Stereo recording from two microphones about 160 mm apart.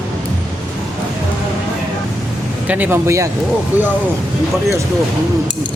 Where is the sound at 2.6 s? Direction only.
10° right (ahead or behind).